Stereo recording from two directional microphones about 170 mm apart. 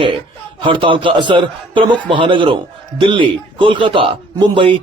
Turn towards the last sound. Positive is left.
turn(degrees=-30)  # may be behind; listen again after turning